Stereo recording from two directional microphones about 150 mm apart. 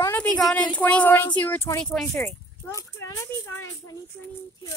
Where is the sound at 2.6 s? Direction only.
20° left (ahead or behind).